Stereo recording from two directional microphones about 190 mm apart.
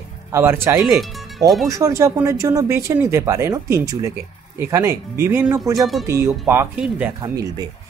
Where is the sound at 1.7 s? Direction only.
15° right (ahead or behind).